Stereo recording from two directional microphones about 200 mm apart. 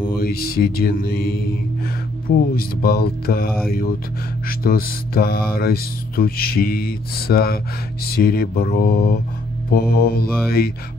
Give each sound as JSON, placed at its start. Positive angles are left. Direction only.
{"t": 0.1, "sound": "music", "side_deg": 50}